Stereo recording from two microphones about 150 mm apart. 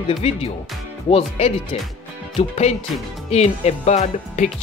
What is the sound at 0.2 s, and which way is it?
Speech, 40° left (ahead or behind).